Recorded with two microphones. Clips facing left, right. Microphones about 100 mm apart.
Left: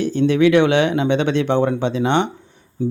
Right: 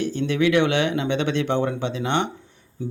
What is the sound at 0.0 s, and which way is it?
Speech, 30° left (ahead or behind).